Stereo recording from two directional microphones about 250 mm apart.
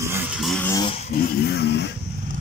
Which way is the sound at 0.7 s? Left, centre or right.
Centre.